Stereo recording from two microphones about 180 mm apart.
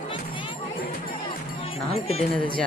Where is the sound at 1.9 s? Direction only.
35° left (ahead or behind).